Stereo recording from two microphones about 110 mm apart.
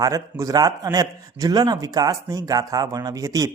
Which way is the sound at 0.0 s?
35° right (ahead or behind).